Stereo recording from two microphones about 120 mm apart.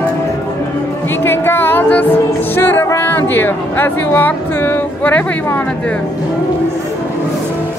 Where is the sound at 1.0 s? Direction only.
20° left (ahead or behind).